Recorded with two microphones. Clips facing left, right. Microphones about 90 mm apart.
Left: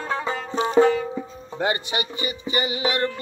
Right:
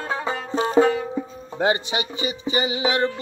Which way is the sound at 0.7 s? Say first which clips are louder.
Left 1 dB; 15° right (ahead or behind).